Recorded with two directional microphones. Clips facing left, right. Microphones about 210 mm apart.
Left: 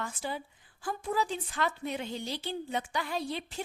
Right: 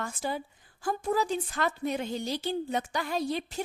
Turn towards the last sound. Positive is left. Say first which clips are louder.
# right 4 dB
turn(degrees=-45)  # may be behind; listen again after turning